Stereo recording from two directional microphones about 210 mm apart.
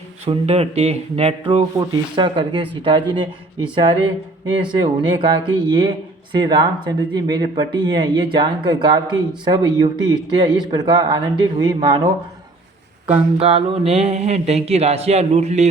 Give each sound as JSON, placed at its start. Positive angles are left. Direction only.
{"t": 0.3, "sound": "speech", "side_deg": -30}
{"t": 13.4, "sound": "speech", "side_deg": -25}